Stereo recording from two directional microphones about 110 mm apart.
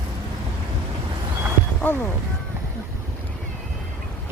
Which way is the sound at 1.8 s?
15° left (ahead or behind).